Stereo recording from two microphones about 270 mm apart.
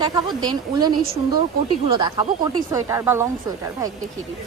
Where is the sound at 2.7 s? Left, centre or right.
Centre.